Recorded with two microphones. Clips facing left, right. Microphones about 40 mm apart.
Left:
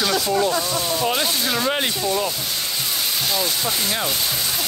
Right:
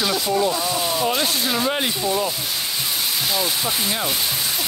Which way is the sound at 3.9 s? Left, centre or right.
Centre.